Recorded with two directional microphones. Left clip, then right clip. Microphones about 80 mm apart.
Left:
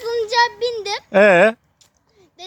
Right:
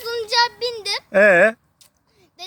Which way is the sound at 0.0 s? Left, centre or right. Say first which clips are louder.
Left 2 dB; left.